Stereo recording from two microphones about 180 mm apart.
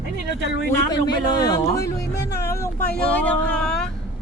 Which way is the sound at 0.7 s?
20° left (ahead or behind).